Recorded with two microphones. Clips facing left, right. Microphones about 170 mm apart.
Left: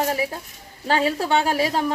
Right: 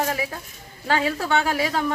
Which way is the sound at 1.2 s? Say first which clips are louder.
Left 2 dB; 35° left (ahead or behind).